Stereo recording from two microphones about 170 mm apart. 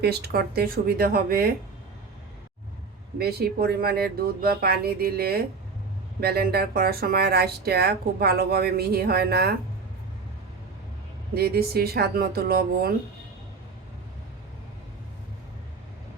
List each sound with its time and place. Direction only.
0.0 s speech: 75° right (ahead or behind)
3.2 s speech: 70° right (ahead or behind)
11.3 s speech: 65° right (ahead or behind)